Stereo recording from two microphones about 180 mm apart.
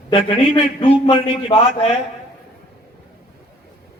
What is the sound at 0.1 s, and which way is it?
A man's voice, 30° left (ahead or behind).